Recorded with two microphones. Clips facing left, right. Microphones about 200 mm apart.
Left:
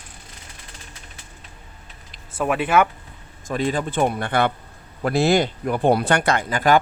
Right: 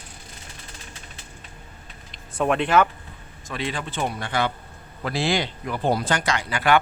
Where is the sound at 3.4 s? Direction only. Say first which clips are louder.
Left 7 dB; 45° left (ahead or behind).